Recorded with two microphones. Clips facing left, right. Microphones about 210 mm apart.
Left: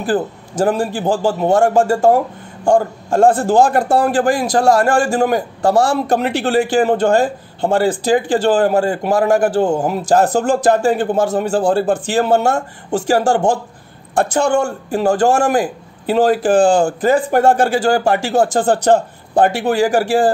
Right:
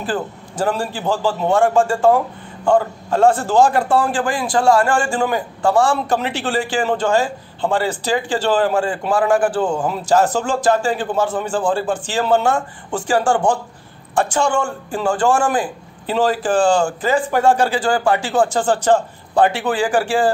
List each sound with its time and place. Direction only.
0.6 s speech: 50° left (ahead or behind)
4.2 s a man's voice: 40° left (ahead or behind)
6.0 s speech: 55° left (ahead or behind)
7.6 s a man's voice: 45° left (ahead or behind)
10.0 s speech: 55° left (ahead or behind)
11.1 s a man's voice: 40° left (ahead or behind)
11.9 s speech: 55° left (ahead or behind)
14.1 s speech: 55° left (ahead or behind)
15.0 s speech: 40° left (ahead or behind)